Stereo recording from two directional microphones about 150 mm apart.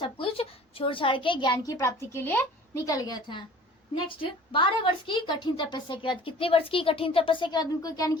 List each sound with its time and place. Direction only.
0.0 s a woman's voice: 35° left (ahead or behind)